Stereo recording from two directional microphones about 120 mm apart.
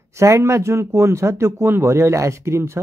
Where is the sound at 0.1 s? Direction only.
25° right (ahead or behind).